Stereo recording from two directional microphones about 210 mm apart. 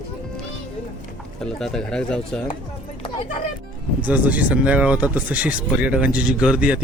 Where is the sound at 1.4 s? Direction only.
Centre (ahead or behind).